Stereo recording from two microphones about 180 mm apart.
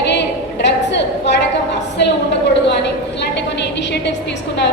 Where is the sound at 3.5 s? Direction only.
75° left (ahead or behind).